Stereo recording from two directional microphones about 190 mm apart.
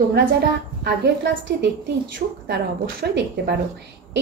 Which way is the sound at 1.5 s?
55° right (ahead or behind).